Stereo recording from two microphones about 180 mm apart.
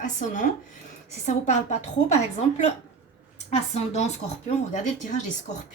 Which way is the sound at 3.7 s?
35° left (ahead or behind).